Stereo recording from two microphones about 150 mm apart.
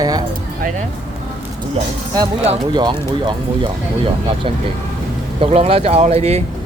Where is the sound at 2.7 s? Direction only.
30° right (ahead or behind).